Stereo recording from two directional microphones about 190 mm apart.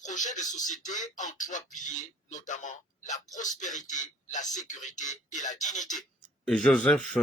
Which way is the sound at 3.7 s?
40° left (ahead or behind).